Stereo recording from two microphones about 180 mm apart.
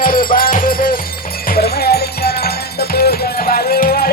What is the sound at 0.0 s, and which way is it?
Music, 50° left (ahead or behind).